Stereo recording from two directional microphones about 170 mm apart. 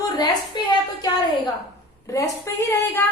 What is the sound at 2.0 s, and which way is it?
Speech, 20° left (ahead or behind).